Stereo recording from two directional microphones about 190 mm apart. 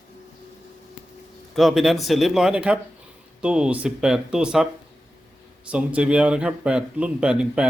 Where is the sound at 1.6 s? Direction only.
Centre (ahead or behind).